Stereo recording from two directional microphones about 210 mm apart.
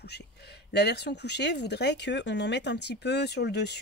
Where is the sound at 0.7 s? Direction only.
50° left (ahead or behind).